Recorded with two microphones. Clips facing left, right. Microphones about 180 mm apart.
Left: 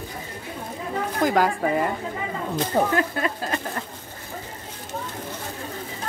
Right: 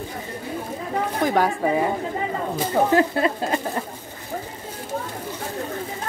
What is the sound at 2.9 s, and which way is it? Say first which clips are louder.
Speech: right 5 dB; 25° right (ahead or behind).